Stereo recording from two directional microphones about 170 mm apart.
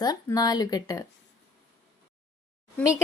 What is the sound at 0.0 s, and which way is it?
A woman's voice, 25° left (ahead or behind).